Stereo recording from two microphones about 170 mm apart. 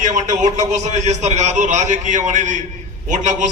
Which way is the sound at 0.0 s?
45° right (ahead or behind).